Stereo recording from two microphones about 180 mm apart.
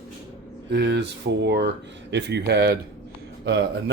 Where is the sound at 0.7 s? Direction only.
70° right (ahead or behind).